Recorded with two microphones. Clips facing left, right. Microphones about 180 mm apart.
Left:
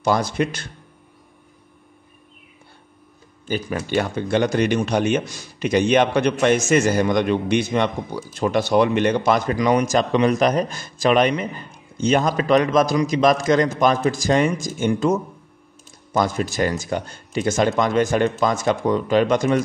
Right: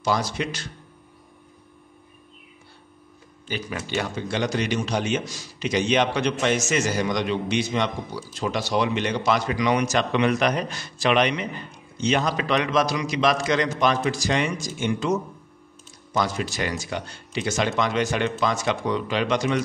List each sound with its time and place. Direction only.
0.0 s speech: 55° left (ahead or behind)
3.4 s a man's voice: 45° left (ahead or behind)